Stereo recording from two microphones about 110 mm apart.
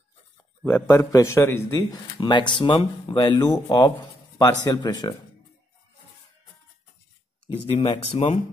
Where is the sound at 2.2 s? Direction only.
45° left (ahead or behind).